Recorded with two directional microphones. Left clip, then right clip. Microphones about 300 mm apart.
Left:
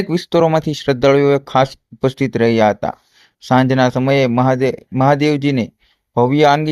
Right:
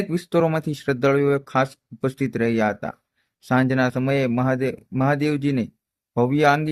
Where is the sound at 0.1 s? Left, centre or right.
Centre.